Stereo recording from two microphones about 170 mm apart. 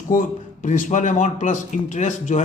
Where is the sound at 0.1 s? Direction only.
50° left (ahead or behind).